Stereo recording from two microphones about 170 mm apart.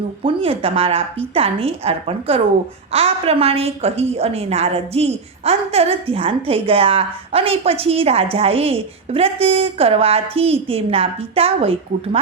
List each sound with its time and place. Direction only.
0.2 s a woman's voice: 35° right (ahead or behind)